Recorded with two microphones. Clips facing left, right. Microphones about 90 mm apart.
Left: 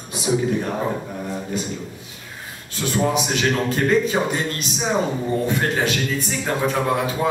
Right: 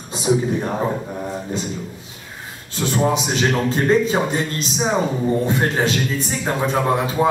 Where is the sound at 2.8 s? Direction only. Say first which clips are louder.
Right 2 dB; 30° right (ahead or behind).